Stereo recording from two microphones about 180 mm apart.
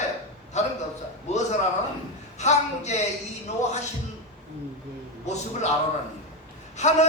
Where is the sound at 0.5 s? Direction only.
40° left (ahead or behind).